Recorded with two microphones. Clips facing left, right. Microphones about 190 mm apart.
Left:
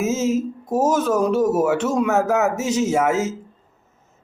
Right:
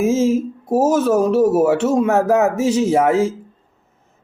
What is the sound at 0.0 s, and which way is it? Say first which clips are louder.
A man's voice: right 4 dB; 30° right (ahead or behind).